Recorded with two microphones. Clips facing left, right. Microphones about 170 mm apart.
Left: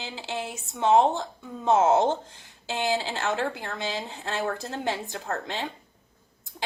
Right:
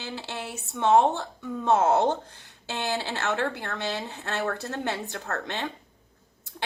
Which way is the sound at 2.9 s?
65° right (ahead or behind).